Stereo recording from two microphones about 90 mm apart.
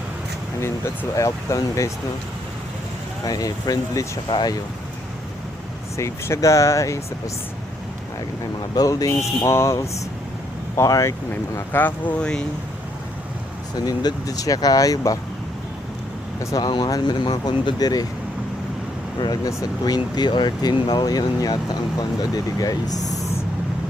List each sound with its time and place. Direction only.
1.1 s speech: 40° left (ahead or behind)
3.2 s speech: 45° left (ahead or behind)
4.3 s speech: 55° left (ahead or behind)
6.0 s speech: 30° left (ahead or behind)
8.7 s speech: 45° left (ahead or behind)
10.8 s speech: 40° left (ahead or behind)
11.5 s speech: 25° left (ahead or behind)
13.7 s speech: 50° left (ahead or behind)
16.6 s speech: 50° left (ahead or behind)
19.5 s speech: 45° left (ahead or behind)